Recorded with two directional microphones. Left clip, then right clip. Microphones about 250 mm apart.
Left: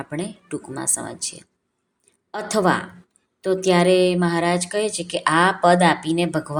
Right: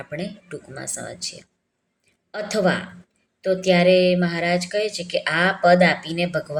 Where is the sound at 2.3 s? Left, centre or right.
Centre.